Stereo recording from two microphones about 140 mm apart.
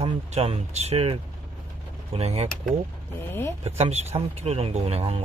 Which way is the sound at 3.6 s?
50° right (ahead or behind).